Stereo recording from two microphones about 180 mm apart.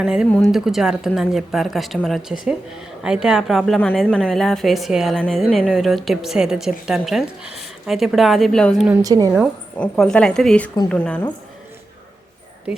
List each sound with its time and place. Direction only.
0.0 s a woman's voice: 5° right (ahead or behind)
9.0 s a woman's voice: 20° right (ahead or behind)
9.7 s a woman's voice: 5° left (ahead or behind)